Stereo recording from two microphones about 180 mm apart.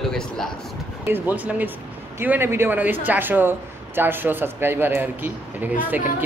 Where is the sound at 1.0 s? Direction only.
10° right (ahead or behind).